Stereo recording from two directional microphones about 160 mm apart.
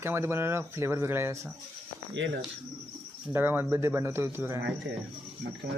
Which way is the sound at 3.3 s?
15° right (ahead or behind).